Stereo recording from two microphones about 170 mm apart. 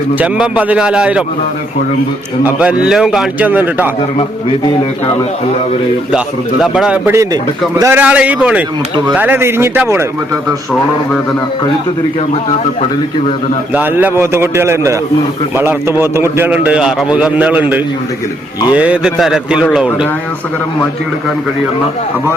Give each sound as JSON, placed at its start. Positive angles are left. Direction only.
{"t": 0.2, "sound": "a man's voice", "side_deg": -10}
{"t": 2.4, "sound": "a man's voice", "side_deg": -5}
{"t": 4.2, "sound": "a man's voice", "side_deg": 35}
{"t": 6.1, "sound": "a man's voice", "side_deg": -5}
{"t": 13.7, "sound": "a man's voice", "side_deg": -10}